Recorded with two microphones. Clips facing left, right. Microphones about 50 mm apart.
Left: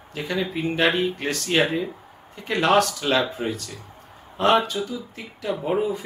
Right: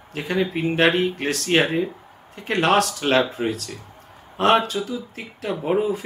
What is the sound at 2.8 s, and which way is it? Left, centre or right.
Speech, right.